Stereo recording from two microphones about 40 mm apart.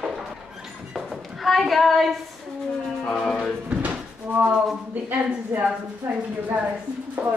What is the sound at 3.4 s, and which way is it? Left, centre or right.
Music, right.